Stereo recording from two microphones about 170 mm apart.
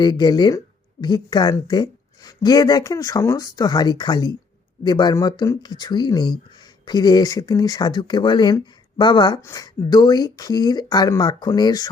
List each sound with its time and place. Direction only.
0.0 s speech: 25° left (ahead or behind)